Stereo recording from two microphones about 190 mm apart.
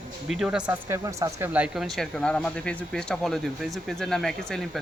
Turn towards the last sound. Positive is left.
turn(degrees=0)  # may be behind; listen again after turning